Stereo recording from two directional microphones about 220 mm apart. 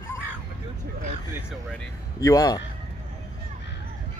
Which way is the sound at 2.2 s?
15° left (ahead or behind).